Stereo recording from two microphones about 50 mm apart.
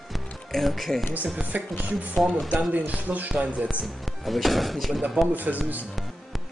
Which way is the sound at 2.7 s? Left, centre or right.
Right.